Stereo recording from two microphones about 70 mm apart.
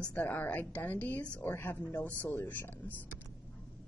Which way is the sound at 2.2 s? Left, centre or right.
Left.